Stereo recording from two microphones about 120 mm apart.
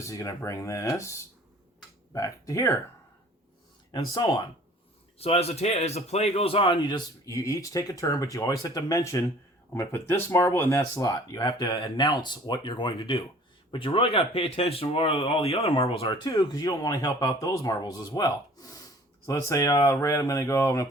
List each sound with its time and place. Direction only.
0.0 s speech: 25° left (ahead or behind)
2.1 s speech: 25° left (ahead or behind)
3.9 s speech: 30° left (ahead or behind)
5.1 s a man's voice: 55° left (ahead or behind)
7.3 s speech: 25° left (ahead or behind); by 15.8 s 55° left (ahead or behind)
16.0 s speech: 40° left (ahead or behind)